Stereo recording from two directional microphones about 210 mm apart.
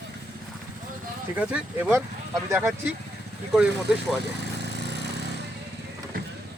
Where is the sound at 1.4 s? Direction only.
5° right (ahead or behind).